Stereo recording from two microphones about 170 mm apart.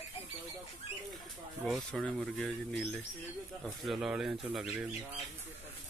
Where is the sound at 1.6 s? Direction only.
Centre (ahead or behind).